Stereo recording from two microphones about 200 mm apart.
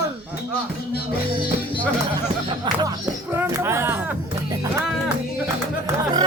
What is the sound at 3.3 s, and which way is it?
Speech, 10° right (ahead or behind).